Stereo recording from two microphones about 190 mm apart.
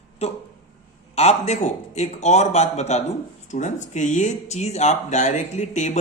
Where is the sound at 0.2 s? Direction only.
35° left (ahead or behind).